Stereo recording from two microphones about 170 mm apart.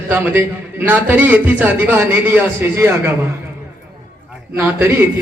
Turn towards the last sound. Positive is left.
turn(degrees=-15)  # may be behind; listen again after turning